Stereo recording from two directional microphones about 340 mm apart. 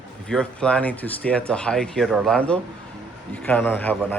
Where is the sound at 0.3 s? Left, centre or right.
Centre.